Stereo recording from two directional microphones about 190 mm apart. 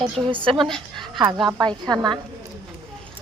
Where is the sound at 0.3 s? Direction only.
25° right (ahead or behind).